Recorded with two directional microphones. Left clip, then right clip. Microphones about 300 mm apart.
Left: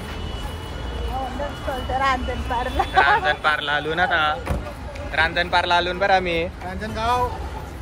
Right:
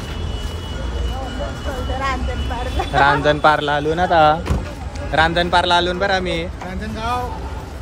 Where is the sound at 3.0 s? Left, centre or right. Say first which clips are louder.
Right 5 dB; centre.